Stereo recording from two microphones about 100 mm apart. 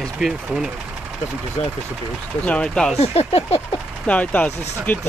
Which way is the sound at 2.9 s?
90° left.